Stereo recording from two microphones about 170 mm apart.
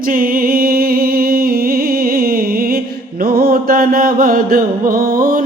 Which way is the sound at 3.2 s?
60° right (ahead or behind).